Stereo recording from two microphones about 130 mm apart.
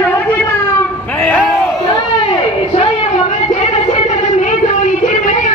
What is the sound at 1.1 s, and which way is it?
Speech, 10° left (ahead or behind).